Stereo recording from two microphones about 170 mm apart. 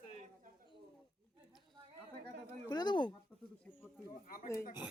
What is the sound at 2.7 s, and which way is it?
Speech, 25° left (ahead or behind).